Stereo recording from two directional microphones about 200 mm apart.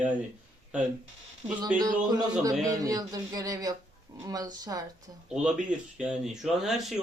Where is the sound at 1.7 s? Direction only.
20° right (ahead or behind).